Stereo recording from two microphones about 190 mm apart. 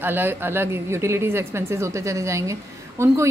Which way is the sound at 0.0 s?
10° right (ahead or behind).